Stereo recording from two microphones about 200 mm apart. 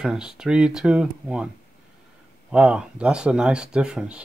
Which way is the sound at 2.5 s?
5° right (ahead or behind).